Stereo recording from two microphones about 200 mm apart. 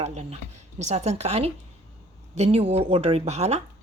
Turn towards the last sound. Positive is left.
turn(degrees=-30)  # may be behind; listen again after turning